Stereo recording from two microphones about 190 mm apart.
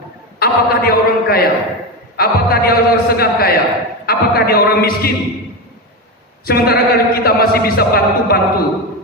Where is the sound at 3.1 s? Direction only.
55° left (ahead or behind).